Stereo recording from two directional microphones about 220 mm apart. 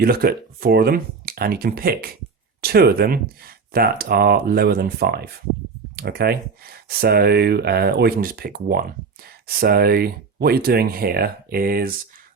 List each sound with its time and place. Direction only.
0.0 s speech: 45° right (ahead or behind)